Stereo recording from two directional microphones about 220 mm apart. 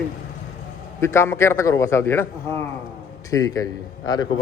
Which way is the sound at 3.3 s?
15° left (ahead or behind).